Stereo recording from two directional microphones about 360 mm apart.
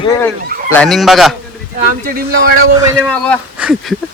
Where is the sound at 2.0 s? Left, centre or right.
Right.